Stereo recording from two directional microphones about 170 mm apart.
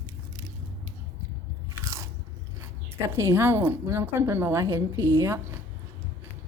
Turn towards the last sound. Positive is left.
turn(degrees=-15)  # may be behind; listen again after turning